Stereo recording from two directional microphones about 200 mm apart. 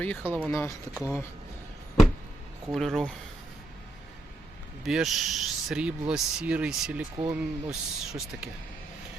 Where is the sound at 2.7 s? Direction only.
Centre (ahead or behind).